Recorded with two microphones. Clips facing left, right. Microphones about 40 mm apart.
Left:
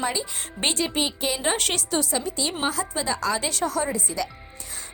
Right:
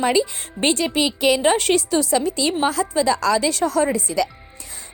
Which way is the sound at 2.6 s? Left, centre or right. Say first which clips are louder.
Right 8 dB; right.